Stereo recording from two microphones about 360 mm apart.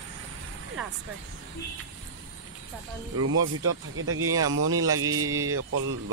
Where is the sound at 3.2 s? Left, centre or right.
Right.